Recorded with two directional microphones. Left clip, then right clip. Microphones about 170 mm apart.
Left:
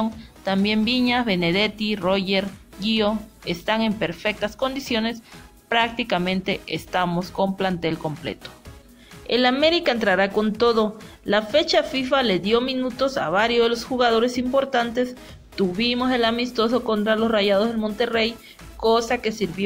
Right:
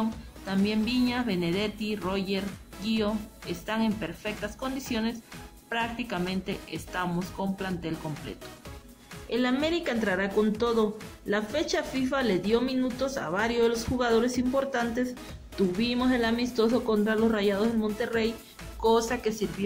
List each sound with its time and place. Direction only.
1.0 s a woman's voice: 25° left (ahead or behind)